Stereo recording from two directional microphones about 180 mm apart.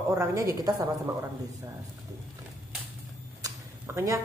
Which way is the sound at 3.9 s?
15° right (ahead or behind).